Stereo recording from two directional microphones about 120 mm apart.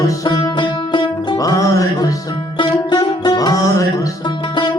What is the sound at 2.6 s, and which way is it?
Music, 40° left (ahead or behind).